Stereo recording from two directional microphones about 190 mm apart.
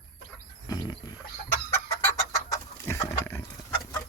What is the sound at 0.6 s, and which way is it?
Roaring cats, 20° left (ahead or behind).